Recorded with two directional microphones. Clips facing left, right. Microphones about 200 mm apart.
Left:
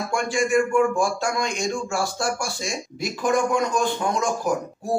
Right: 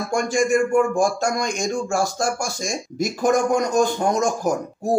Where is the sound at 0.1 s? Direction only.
45° right (ahead or behind).